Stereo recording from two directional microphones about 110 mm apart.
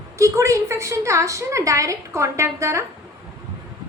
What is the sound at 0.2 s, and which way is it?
A woman's voice, 25° right (ahead or behind).